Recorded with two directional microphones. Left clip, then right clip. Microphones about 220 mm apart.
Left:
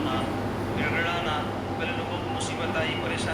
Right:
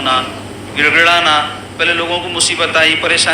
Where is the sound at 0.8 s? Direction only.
45° right (ahead or behind).